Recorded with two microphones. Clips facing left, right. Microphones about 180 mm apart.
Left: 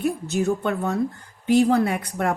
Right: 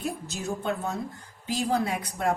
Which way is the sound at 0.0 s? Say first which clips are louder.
Left 10 dB; 65° left (ahead or behind).